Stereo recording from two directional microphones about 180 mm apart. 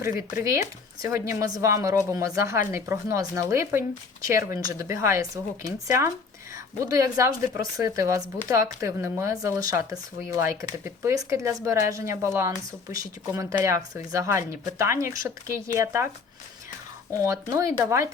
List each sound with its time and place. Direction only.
0.0 s speech: 15° right (ahead or behind)
6.7 s speech: 15° right (ahead or behind)
17.2 s speech: 20° right (ahead or behind)